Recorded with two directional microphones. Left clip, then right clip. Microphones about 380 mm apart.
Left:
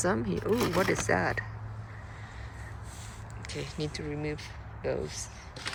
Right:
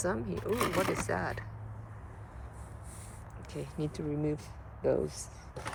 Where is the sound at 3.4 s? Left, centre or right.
Centre.